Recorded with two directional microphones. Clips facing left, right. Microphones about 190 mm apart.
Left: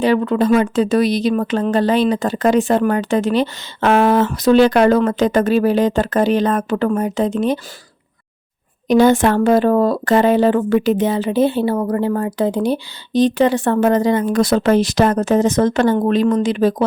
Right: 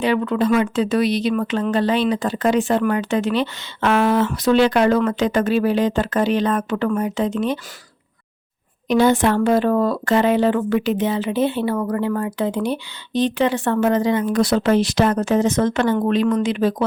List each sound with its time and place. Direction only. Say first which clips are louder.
0.0 s speech: left 3 dB; 40° left (ahead or behind)
8.9 s speech: left 4 dB; 45° left (ahead or behind)